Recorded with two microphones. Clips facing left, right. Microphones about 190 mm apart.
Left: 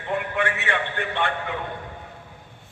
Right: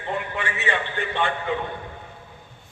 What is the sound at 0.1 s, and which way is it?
A man's voice, 60° left (ahead or behind).